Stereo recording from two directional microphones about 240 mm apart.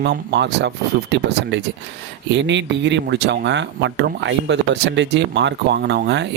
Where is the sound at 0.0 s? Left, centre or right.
Right.